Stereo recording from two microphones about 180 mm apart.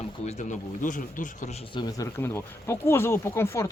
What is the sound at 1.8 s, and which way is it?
Speech, 20° left (ahead or behind).